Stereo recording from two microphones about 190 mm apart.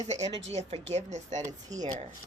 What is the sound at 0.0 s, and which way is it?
Speech, 35° right (ahead or behind).